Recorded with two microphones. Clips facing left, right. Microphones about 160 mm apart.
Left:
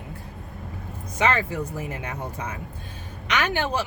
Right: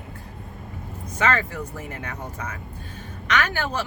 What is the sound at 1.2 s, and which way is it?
Speech, 15° left (ahead or behind).